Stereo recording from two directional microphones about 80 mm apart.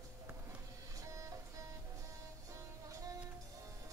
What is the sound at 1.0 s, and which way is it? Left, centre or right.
Music, right.